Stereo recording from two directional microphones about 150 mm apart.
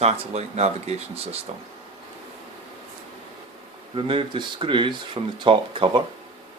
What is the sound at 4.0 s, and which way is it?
Speech, 35° right (ahead or behind).